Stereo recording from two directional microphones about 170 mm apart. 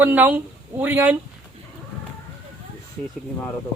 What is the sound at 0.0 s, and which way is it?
Speech, 10° right (ahead or behind).